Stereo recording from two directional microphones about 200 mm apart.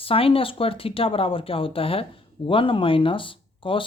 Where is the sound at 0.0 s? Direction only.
30° left (ahead or behind).